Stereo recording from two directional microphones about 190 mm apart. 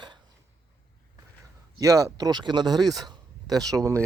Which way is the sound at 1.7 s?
15° right (ahead or behind).